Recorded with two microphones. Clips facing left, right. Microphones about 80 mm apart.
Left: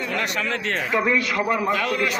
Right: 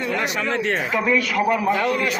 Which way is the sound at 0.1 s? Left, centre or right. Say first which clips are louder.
Right 2 dB; centre.